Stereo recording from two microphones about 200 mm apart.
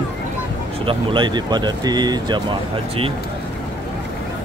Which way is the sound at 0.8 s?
25° right (ahead or behind).